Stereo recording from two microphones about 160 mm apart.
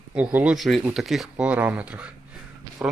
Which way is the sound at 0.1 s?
10° right (ahead or behind).